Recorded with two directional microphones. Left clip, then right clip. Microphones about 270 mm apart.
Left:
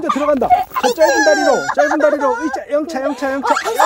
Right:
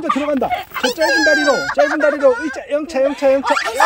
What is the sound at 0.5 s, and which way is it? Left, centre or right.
Fowl, left.